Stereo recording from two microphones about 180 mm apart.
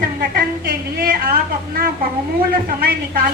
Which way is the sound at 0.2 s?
55° right (ahead or behind).